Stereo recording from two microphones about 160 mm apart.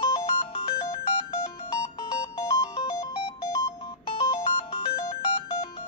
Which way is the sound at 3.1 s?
35° left (ahead or behind).